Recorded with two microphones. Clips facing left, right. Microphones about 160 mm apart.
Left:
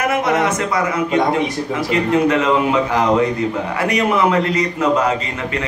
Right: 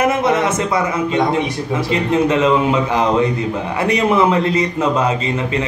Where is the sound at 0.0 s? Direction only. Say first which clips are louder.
Right 2 dB; 25° right (ahead or behind).